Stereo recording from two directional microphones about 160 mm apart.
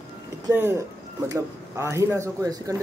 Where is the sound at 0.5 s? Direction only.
15° right (ahead or behind).